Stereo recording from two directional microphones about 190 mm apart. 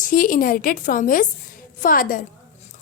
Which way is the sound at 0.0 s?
45° left (ahead or behind).